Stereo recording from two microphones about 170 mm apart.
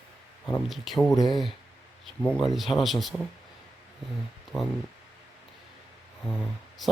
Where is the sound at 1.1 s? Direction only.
20° left (ahead or behind).